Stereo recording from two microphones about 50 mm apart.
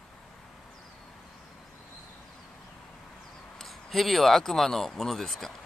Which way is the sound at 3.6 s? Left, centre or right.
Centre.